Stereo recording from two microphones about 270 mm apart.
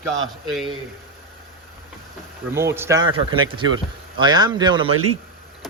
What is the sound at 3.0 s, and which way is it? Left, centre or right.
Speech, right.